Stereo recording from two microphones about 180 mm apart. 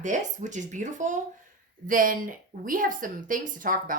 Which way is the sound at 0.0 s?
45° right (ahead or behind).